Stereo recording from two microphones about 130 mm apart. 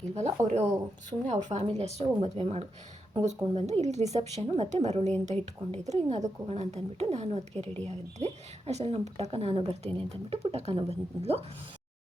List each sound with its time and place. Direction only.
0.1 s speech: 55° right (ahead or behind)